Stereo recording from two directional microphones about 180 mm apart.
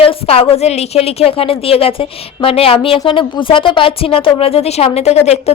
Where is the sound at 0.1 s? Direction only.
30° left (ahead or behind).